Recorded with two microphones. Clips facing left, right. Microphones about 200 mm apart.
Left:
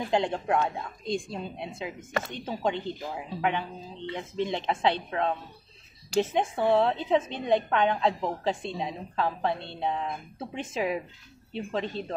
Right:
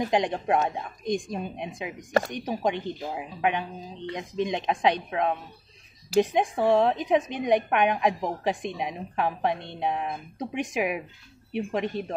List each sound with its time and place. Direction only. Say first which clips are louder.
0.1 s a woman's voice: left 1 dB; 15° right (ahead or behind)